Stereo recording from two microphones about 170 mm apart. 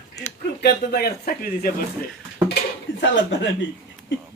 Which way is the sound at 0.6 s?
65° left (ahead or behind).